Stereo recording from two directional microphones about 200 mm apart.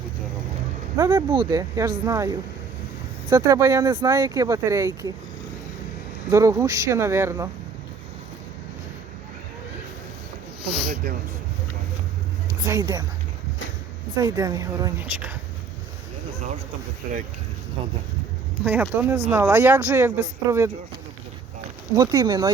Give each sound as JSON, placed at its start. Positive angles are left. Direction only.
{"t": 1.1, "sound": "speech", "side_deg": -25}
{"t": 6.3, "sound": "speech", "side_deg": -15}
{"t": 10.8, "sound": "speech", "side_deg": -50}
{"t": 12.6, "sound": "speech", "side_deg": -20}
{"t": 14.2, "sound": "speech", "side_deg": -20}
{"t": 17.0, "sound": "speech", "side_deg": -40}
{"t": 18.6, "sound": "speech", "side_deg": -10}
{"t": 21.9, "sound": "speech", "side_deg": -20}